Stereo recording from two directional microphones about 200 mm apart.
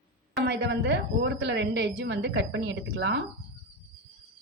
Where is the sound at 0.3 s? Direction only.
60° right (ahead or behind).